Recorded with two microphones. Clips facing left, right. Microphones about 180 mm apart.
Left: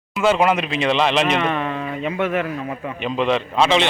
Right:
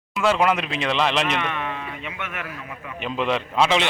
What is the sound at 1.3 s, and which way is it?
A man's voice, 35° left (ahead or behind).